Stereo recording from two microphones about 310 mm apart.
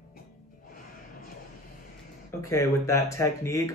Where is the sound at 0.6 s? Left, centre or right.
Left.